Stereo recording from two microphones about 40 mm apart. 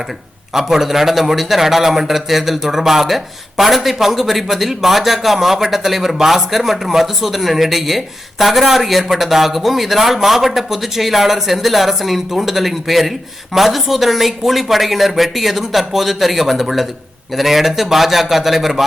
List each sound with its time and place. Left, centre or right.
0.5 s a man's voice: centre